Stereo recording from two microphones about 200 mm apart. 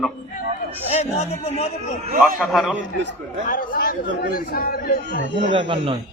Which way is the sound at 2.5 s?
Centre (ahead or behind).